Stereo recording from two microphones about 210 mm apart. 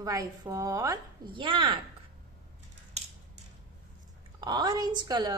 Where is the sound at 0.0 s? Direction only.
15° right (ahead or behind).